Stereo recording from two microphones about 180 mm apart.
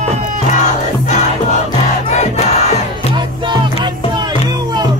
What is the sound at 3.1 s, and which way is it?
Music, 25° right (ahead or behind).